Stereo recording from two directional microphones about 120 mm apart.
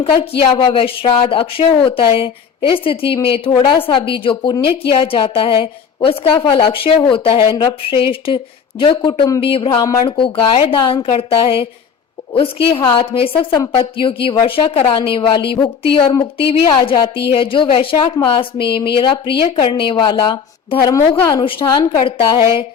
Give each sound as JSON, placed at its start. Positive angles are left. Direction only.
{"t": 0.0, "sound": "a woman's voice", "side_deg": 50}
{"t": 9.4, "sound": "a woman's voice", "side_deg": 50}
{"t": 9.6, "sound": "a woman's voice", "side_deg": 30}
{"t": 10.1, "sound": "a woman's voice", "side_deg": 45}